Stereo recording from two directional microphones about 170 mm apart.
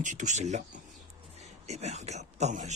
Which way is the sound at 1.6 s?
40° right (ahead or behind).